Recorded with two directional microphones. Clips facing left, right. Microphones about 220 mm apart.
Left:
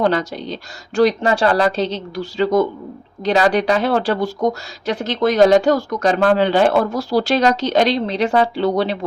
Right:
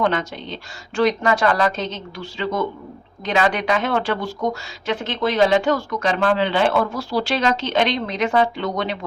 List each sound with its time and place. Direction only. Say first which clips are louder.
0.0 s speech: left 4 dB; 35° left (ahead or behind)